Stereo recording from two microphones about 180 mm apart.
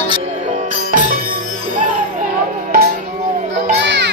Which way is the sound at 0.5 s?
45° right (ahead or behind).